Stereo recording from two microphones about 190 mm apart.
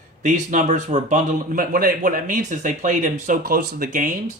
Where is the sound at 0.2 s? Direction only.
40° right (ahead or behind).